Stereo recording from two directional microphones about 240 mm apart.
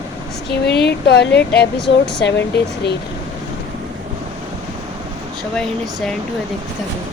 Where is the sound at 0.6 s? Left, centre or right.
Left.